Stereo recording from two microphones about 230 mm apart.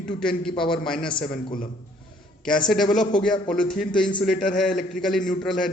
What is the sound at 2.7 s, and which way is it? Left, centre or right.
A man's voice, centre.